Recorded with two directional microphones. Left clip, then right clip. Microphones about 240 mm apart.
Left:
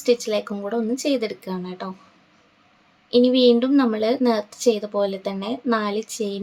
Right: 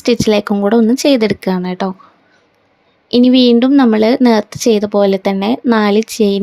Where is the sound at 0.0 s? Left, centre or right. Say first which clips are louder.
Right 8 dB; right.